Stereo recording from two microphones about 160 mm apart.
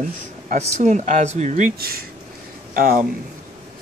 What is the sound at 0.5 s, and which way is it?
Speech, 45° right (ahead or behind).